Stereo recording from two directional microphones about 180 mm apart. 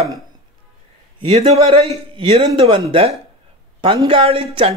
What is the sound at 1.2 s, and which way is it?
A man's voice, 30° right (ahead or behind).